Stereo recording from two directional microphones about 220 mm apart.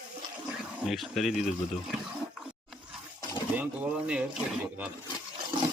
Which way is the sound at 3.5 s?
5° right (ahead or behind).